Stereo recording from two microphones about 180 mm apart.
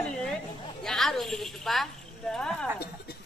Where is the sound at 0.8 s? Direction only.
Centre (ahead or behind).